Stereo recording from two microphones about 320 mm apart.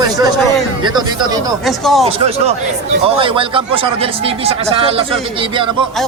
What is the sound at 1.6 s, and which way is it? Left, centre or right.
Speech, centre.